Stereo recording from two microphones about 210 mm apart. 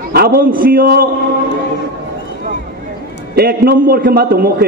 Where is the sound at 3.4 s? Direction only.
45° right (ahead or behind).